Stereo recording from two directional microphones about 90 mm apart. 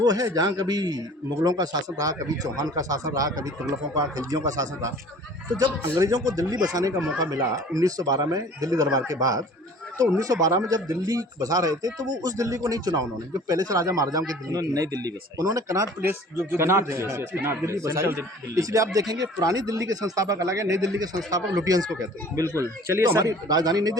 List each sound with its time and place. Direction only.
0.0 s a man's voice: 45° right (ahead or behind)
16.0 s speech: 25° right (ahead or behind)
23.2 s speech: 45° right (ahead or behind)